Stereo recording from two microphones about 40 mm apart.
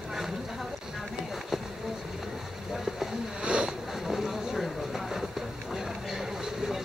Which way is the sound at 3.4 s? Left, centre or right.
Right.